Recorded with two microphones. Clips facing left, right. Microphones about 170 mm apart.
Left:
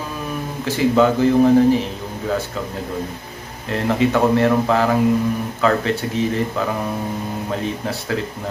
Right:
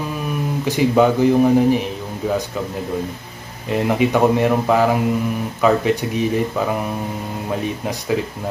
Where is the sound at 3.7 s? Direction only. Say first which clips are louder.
Right 1 dB; 15° right (ahead or behind).